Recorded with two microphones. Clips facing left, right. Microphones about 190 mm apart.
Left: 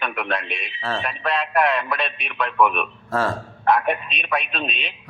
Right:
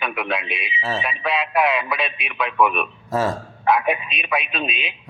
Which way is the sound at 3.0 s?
15° right (ahead or behind).